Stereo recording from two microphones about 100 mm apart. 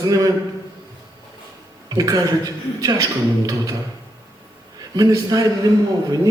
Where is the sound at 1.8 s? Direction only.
35° right (ahead or behind).